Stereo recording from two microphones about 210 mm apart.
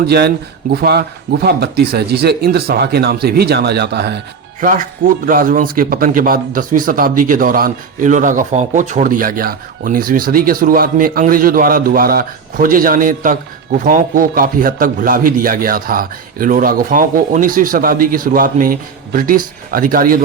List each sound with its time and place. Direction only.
0.0 s speech: 50° right (ahead or behind)
4.6 s speech: 40° right (ahead or behind)